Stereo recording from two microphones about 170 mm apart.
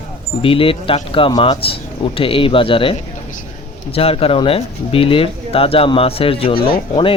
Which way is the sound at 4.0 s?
35° left (ahead or behind).